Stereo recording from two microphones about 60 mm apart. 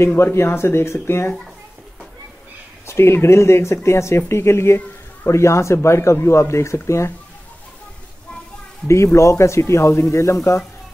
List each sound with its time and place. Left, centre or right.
0.0 s speech: left
2.9 s speech: left
8.8 s speech: left